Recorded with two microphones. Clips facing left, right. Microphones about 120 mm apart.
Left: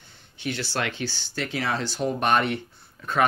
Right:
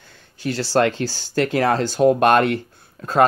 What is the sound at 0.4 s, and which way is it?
Speech, 35° right (ahead or behind).